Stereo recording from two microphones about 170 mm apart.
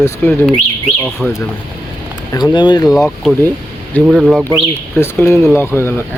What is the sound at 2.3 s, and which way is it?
Speech, 25° left (ahead or behind).